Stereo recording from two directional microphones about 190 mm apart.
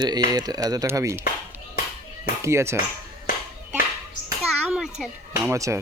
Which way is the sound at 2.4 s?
15° right (ahead or behind).